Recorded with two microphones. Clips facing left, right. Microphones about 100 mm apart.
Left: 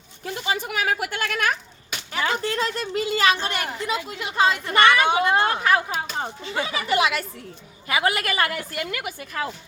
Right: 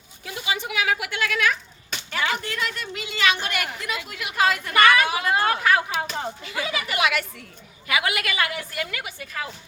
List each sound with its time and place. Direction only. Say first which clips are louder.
0.4 s a sound: even; 45° left (ahead or behind)
2.2 s a woman's voice: left 3 dB; 30° left (ahead or behind)
6.1 s chopping: left 2 dB; 30° left (ahead or behind)
7.9 s a woman's voice: left 2 dB; 35° left (ahead or behind)